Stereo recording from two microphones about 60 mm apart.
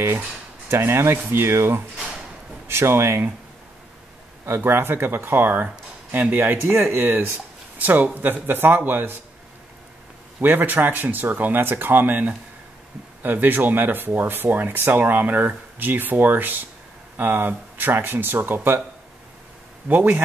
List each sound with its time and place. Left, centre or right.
0.7 s speech: right
4.5 s speech: right
10.4 s speech: right
19.9 s a man's voice: right